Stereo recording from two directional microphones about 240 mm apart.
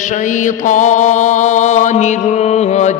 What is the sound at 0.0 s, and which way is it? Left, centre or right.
Mantra, left.